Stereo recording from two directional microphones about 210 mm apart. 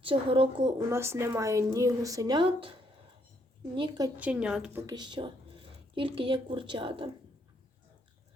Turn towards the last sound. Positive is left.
turn(degrees=-25)  # may be behind; listen again after turning